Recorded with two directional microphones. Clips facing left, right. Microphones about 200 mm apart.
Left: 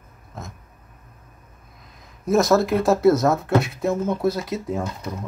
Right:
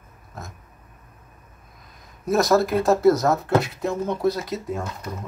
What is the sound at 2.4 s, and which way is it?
Speech, 15° right (ahead or behind).